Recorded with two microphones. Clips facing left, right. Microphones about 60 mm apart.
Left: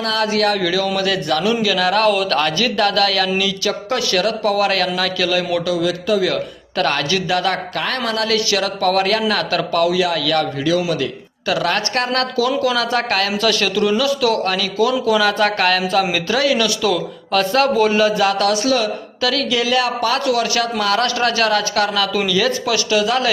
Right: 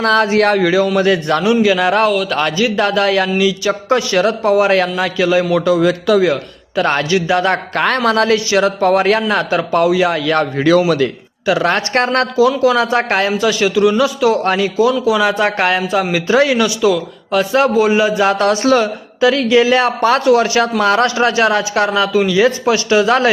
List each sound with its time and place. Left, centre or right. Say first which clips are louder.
0.0 s a man's voice: right 6 dB; right
2.3 s speech: right 2 dB; centre
5.6 s a man's voice: right 6 dB; right
8.3 s speech: right 5 dB; right
10.7 s a man's voice: right 9 dB; right
11.4 s speech: right 4 dB; right
13.3 s speech: right 4 dB; centre
18.3 s speech: right 4 dB; right